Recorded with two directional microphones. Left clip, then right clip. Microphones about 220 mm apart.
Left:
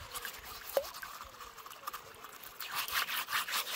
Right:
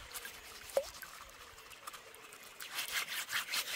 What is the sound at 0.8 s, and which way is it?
Drip, 10° left (ahead or behind).